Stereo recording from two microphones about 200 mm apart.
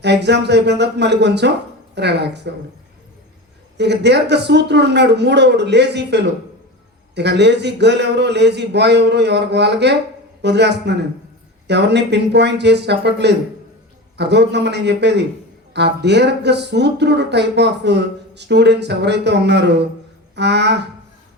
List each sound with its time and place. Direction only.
0.0 s speech: 60° right (ahead or behind)
3.8 s speech: 60° right (ahead or behind)